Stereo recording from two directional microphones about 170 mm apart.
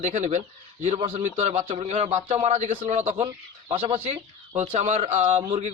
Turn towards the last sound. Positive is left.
turn(degrees=-40)  # may be behind; listen again after turning